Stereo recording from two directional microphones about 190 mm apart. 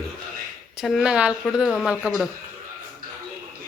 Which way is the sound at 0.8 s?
Centre (ahead or behind).